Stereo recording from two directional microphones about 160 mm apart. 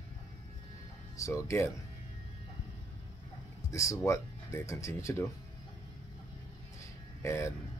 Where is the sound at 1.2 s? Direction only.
20° left (ahead or behind).